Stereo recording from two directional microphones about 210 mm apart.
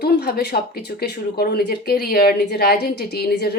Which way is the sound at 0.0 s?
50° left (ahead or behind).